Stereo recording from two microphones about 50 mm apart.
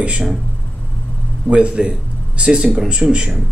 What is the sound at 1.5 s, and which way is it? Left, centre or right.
Speech, right.